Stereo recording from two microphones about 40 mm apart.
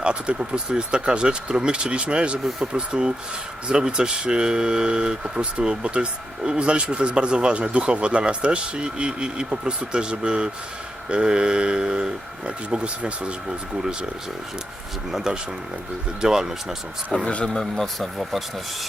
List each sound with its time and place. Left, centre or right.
0.0 s speech: right
12.5 s speech: right
15.1 s speech: centre
17.2 s speech: left
18.2 s speech: centre